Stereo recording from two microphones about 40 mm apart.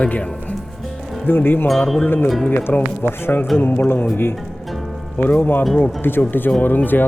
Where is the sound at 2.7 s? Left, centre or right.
Left.